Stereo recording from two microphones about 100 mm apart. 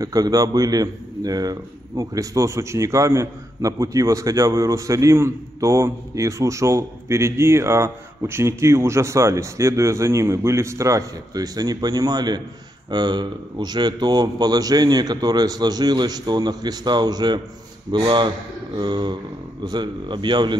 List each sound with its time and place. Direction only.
0.0 s a man's voice: 35° right (ahead or behind)